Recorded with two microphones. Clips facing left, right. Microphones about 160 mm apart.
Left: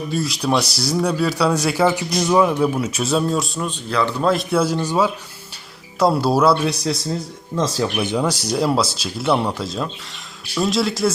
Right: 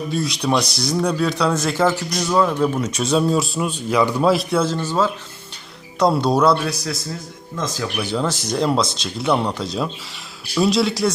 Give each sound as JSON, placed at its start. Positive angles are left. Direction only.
{"t": 0.1, "sound": "a man's voice", "side_deg": 5}
{"t": 6.7, "sound": "a man's voice", "side_deg": 25}